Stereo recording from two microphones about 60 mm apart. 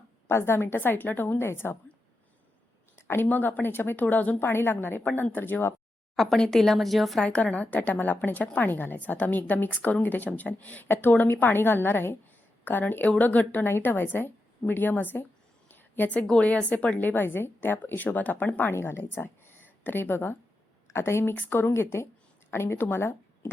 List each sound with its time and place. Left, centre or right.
0.3 s a woman's voice: left
3.1 s a woman's voice: left
6.1 s speech: centre
7.2 s a woman's voice: left
15.7 s a sound: left
16.4 s a woman's voice: left
17.0 s a woman's voice: left
18.7 s a woman's voice: left